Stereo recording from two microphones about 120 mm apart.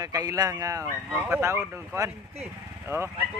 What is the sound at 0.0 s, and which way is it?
Speech, 30° right (ahead or behind).